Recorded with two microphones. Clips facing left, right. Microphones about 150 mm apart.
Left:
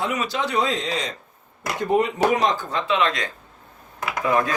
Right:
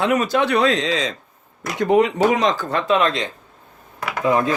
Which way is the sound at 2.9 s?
45° right (ahead or behind).